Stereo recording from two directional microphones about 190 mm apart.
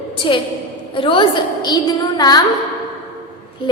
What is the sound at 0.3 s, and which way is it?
A woman's voice, 25° left (ahead or behind).